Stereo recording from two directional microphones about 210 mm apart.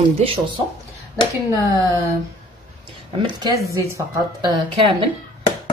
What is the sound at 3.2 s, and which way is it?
Speech, 20° right (ahead or behind).